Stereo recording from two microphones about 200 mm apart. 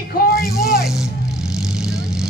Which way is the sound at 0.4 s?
Centre (ahead or behind).